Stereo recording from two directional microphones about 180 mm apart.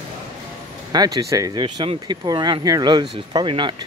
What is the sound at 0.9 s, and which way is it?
Speech, 20° right (ahead or behind).